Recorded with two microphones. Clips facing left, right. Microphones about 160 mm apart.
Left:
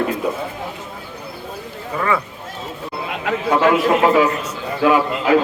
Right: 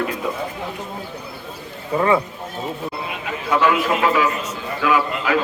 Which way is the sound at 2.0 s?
25° right (ahead or behind).